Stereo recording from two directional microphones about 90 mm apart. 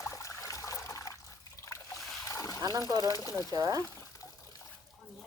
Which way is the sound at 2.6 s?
45° right (ahead or behind).